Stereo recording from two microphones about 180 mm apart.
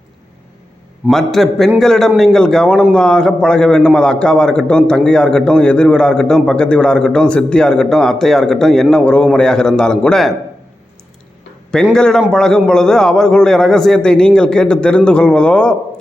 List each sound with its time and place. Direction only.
1.0 s a man's voice: centre (ahead or behind)
11.9 s a man's voice: 5° left (ahead or behind)